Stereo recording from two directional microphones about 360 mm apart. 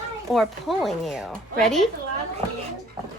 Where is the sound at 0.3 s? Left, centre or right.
Centre.